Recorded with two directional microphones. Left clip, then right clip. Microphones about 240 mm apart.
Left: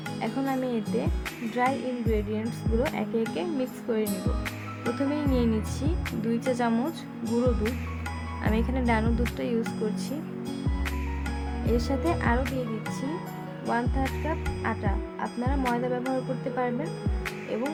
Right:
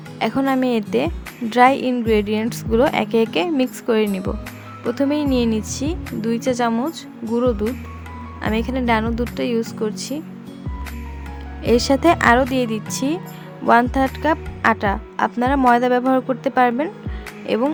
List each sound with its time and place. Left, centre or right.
0.2 s a woman's voice: right
7.2 s speech: centre
8.4 s speech: right
11.6 s a woman's voice: right